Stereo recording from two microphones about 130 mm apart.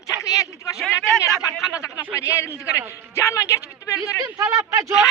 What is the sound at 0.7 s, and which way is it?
Speech, centre (ahead or behind).